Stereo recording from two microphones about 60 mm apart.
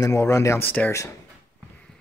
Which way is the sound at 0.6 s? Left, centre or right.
Left.